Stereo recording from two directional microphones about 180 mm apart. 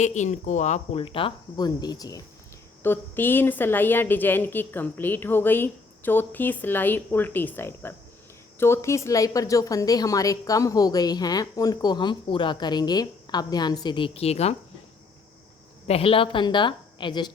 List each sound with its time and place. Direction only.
0.0 s a woman's voice: 40° left (ahead or behind)
15.9 s a woman's voice: 30° left (ahead or behind)